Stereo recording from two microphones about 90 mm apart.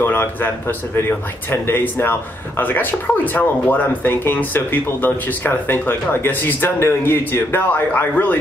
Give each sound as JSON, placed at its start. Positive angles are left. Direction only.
{"t": 0.0, "sound": "a man's voice", "side_deg": 20}